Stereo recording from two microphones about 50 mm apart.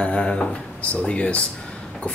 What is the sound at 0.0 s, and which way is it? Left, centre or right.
Speech, centre.